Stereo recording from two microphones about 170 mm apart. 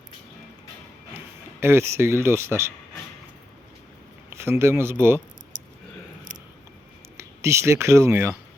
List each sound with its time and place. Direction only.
1.6 s speech: 15° right (ahead or behind)
4.3 s a man's voice: 15° right (ahead or behind)
7.2 s speech: 15° right (ahead or behind)